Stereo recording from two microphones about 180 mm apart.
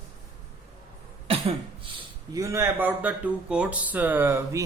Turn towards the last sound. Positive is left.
turn(degrees=-15)  # may be behind; listen again after turning